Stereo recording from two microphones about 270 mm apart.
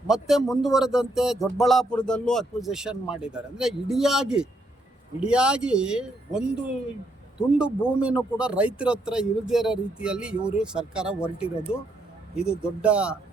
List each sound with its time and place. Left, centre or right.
0.1 s speech: centre
7.9 s speech: centre